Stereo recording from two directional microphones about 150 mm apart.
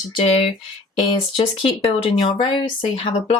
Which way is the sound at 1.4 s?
35° left (ahead or behind).